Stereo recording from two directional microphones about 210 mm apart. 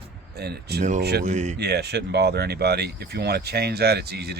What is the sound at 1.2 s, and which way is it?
Speech, 35° right (ahead or behind).